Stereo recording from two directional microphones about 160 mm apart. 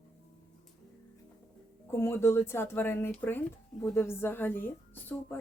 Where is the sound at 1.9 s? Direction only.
15° left (ahead or behind).